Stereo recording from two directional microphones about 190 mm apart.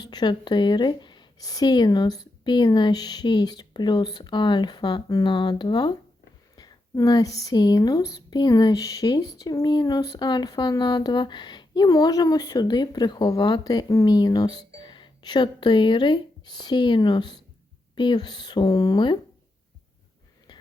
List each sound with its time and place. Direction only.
0.0 s speech: 20° left (ahead or behind)